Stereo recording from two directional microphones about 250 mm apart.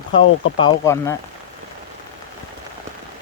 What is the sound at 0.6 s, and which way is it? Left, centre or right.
Speech, centre.